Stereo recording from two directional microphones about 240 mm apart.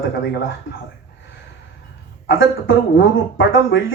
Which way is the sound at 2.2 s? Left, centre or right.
Left.